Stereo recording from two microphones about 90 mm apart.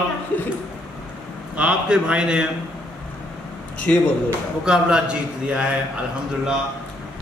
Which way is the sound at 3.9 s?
15° left (ahead or behind).